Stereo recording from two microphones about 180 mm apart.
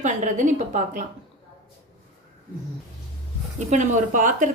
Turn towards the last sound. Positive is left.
turn(degrees=-45)  # may be behind; listen again after turning